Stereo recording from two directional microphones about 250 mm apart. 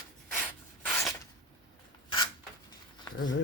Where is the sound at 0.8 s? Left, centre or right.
Centre.